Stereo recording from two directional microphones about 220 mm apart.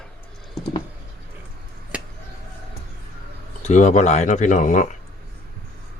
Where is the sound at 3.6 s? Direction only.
30° left (ahead or behind).